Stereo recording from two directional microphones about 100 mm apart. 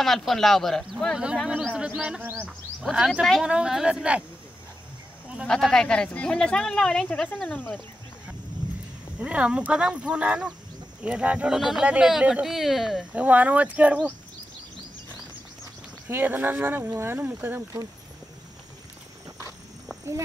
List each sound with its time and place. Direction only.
0.0 s speech: 5° left (ahead or behind)
5.5 s speech: 5° left (ahead or behind)
9.2 s speech: 10° right (ahead or behind)
13.1 s speech: 15° right (ahead or behind)
16.1 s speech: 20° right (ahead or behind)